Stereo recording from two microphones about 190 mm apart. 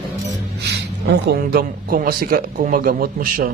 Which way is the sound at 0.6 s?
65° right (ahead or behind).